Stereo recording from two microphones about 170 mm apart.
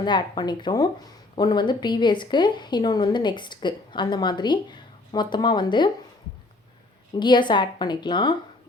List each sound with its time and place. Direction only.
0.0 s speech: 25° left (ahead or behind)
7.2 s speech: 30° left (ahead or behind)